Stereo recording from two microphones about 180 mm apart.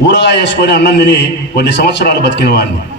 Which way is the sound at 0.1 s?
75° left (ahead or behind).